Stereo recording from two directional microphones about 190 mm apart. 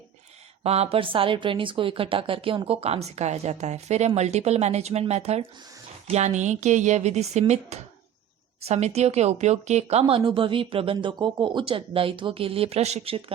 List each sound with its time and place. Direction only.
0.6 s speech: 35° right (ahead or behind)